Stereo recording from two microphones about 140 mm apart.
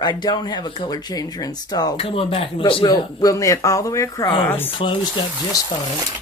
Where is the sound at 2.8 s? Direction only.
25° left (ahead or behind).